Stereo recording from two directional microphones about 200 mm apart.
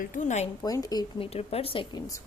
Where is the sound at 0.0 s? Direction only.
40° left (ahead or behind).